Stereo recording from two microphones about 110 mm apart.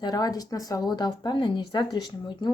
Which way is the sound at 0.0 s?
35° left (ahead or behind).